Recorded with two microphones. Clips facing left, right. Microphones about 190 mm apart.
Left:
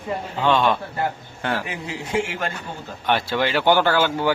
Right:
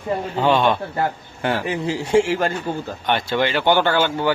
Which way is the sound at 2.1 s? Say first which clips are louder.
Right 7 dB; 35° right (ahead or behind).